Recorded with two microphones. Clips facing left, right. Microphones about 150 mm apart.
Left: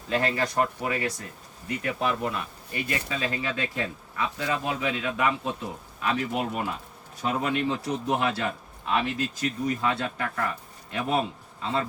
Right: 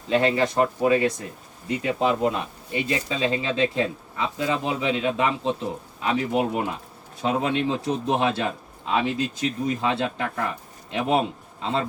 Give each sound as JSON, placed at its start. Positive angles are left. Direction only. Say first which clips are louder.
{"t": 0.1, "sound": "a man's voice", "louder": "right 5 dB", "side_deg": -25}